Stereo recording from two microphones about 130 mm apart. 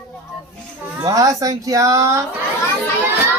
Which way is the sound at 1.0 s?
25° right (ahead or behind).